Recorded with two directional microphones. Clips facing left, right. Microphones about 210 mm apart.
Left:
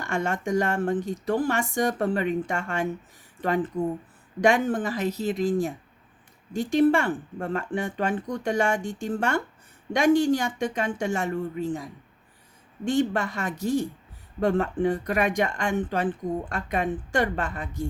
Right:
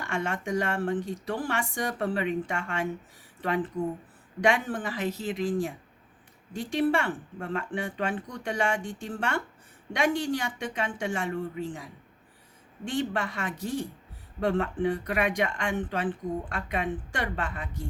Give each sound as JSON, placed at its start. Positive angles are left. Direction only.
{"t": 0.0, "sound": "speech", "side_deg": 45}